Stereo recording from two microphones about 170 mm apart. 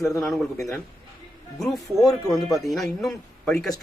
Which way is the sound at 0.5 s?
15° left (ahead or behind).